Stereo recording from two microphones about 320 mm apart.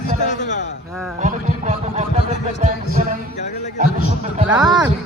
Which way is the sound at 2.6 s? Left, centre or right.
Right.